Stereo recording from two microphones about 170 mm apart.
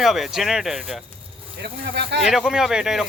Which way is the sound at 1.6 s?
85° right.